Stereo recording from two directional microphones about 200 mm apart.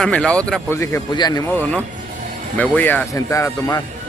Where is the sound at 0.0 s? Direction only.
5° left (ahead or behind); by 1.4 s 20° left (ahead or behind).